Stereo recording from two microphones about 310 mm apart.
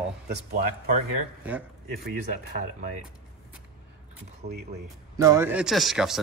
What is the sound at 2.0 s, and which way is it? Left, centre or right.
Speech, right.